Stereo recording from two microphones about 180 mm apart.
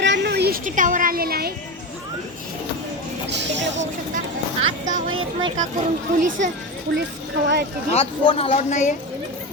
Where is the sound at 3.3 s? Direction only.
80° right.